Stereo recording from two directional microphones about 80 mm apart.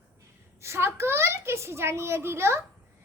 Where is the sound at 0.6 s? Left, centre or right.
Right.